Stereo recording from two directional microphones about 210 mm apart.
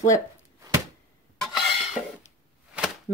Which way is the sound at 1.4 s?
Centre (ahead or behind).